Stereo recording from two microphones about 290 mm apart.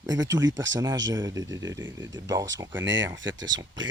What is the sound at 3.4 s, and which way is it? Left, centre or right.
Speech, centre.